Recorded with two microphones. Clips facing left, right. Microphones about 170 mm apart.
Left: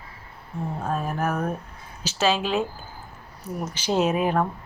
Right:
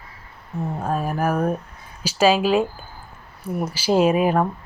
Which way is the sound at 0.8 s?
10° right (ahead or behind).